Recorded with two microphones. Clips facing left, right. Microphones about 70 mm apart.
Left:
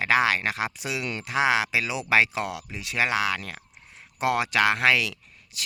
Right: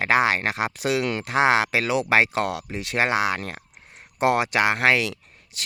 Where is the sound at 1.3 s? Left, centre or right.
Right.